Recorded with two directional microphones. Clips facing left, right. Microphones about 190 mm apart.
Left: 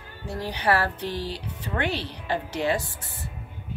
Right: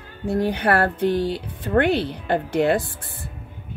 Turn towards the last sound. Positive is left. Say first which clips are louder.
# right 7 dB
turn(degrees=-55)  # may be behind; listen again after turning